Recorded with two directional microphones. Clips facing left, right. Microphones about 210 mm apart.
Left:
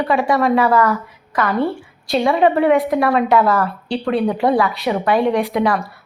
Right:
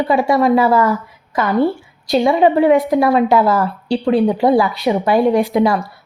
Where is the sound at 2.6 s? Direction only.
Centre (ahead or behind).